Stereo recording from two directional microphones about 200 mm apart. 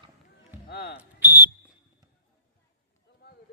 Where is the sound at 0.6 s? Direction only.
50° left (ahead or behind).